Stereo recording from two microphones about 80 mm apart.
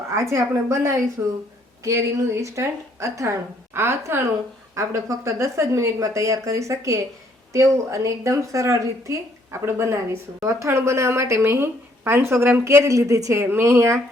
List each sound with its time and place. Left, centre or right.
0.1 s speech: right
13.4 s speech: right